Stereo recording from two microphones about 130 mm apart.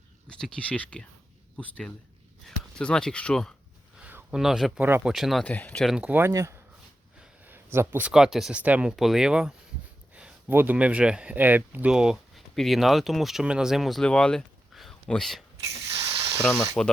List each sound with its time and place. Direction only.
0.3 s speech: 5° left (ahead or behind)
4.0 s a sound: 10° right (ahead or behind)
4.8 s speech: 15° right (ahead or behind)
5.1 s speech: centre (ahead or behind)
5.5 s speech: 10° left (ahead or behind)
5.9 s speech: 10° right (ahead or behind)
7.2 s a sound: 15° right (ahead or behind)
8.1 s speech: 5° right (ahead or behind)
16.0 s a sound: 20° right (ahead or behind)
16.6 s speech: 5° left (ahead or behind)